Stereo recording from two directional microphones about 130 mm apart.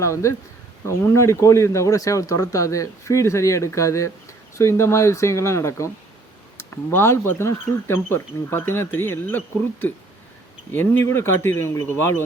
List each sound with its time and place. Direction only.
0.0 s speech: 25° left (ahead or behind)
10.7 s speech: 15° left (ahead or behind)